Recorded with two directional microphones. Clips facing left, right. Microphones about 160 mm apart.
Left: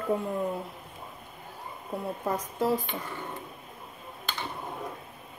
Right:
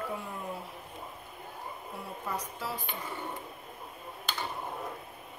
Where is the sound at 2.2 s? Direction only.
50° left (ahead or behind).